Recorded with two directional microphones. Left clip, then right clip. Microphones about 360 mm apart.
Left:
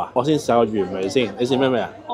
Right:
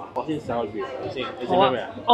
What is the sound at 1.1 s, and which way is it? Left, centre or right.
Speech, left.